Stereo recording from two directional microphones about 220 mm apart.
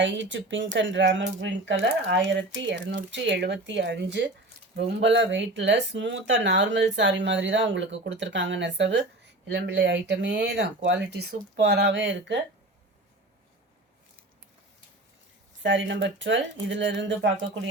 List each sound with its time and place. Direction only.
0.0 s speech: 55° right (ahead or behind)
15.6 s speech: 55° right (ahead or behind)